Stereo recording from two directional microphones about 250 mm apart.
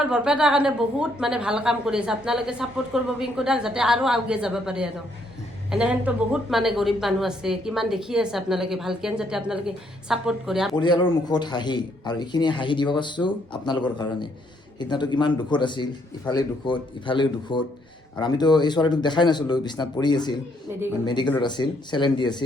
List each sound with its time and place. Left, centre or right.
0.0 s a woman's voice: centre
10.8 s speech: centre